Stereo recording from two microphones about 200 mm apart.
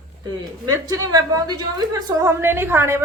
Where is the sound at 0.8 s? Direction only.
20° right (ahead or behind).